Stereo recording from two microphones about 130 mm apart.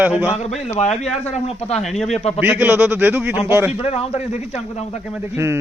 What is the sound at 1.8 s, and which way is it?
Speech, centre (ahead or behind).